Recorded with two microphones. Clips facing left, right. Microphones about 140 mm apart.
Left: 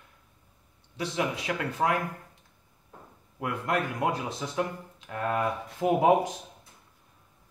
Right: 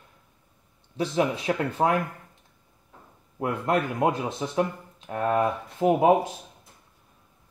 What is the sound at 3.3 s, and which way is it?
Speech, 35° right (ahead or behind).